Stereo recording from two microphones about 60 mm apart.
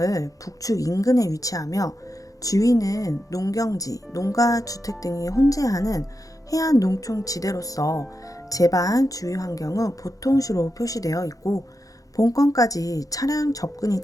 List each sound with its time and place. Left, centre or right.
0.0 s speech: left